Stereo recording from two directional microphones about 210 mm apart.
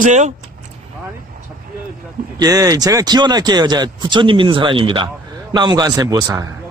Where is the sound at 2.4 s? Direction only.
15° right (ahead or behind).